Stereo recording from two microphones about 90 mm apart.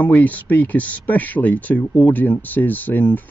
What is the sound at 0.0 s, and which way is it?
Speech, 20° left (ahead or behind).